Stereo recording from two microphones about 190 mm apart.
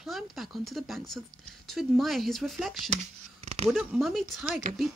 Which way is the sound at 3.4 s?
35° right (ahead or behind).